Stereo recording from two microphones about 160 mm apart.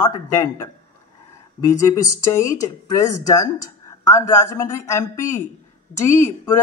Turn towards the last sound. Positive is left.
turn(degrees=15)  # may be behind; listen again after turning